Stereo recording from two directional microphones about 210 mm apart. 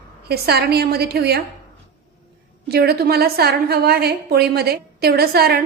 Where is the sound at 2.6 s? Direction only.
50° right (ahead or behind).